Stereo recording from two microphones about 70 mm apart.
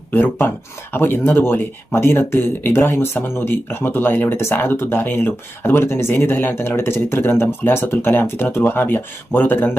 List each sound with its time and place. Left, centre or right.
0.1 s speech: left